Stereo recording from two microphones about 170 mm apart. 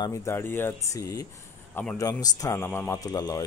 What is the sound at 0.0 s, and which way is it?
Speech, 15° left (ahead or behind).